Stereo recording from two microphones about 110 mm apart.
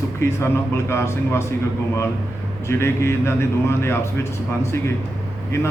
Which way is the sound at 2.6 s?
25° left (ahead or behind).